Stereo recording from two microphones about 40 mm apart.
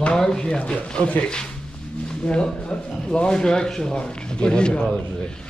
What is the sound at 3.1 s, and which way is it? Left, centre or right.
Speech, left.